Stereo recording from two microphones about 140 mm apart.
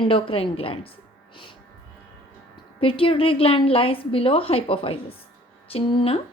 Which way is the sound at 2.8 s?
40° left (ahead or behind).